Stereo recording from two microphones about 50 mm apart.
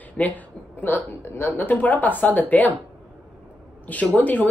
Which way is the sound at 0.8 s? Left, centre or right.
Left.